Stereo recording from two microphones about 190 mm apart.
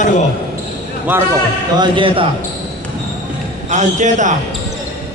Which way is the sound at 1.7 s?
25° right (ahead or behind).